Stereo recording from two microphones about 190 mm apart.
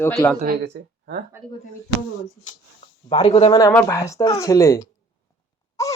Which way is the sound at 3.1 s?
30° left (ahead or behind).